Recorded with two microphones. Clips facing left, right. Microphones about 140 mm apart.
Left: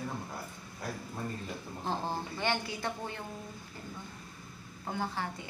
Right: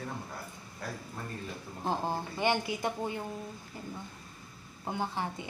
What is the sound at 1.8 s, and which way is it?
A woman's voice, 15° right (ahead or behind).